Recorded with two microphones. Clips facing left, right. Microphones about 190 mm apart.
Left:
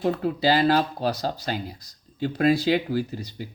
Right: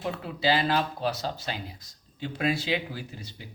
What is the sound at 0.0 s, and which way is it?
Speech, 45° left (ahead or behind).